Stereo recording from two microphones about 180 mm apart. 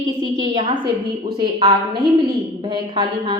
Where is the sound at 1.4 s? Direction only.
25° right (ahead or behind).